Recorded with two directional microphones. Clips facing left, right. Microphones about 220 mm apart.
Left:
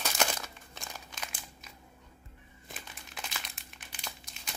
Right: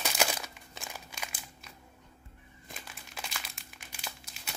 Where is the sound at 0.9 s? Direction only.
10° right (ahead or behind).